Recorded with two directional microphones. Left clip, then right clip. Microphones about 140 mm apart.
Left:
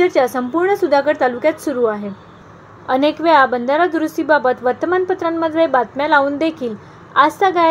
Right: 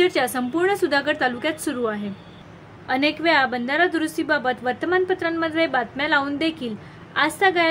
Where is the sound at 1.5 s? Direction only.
30° right (ahead or behind).